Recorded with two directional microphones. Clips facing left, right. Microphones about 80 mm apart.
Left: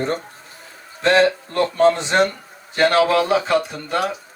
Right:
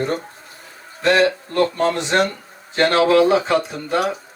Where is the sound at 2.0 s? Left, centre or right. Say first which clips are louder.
Left 1 dB; centre.